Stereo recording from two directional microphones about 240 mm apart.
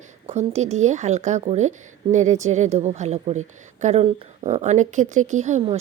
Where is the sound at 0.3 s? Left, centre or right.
Right.